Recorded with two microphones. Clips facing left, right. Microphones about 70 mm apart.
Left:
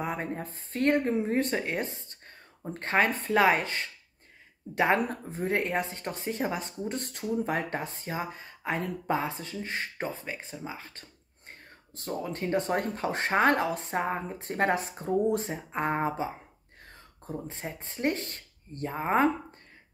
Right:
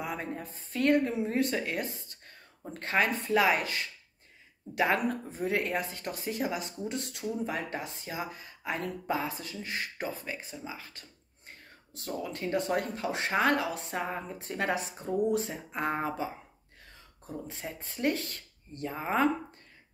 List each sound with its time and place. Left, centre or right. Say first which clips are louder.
0.0 s speech: left 3 dB; left
17.5 s speech: left 2 dB; left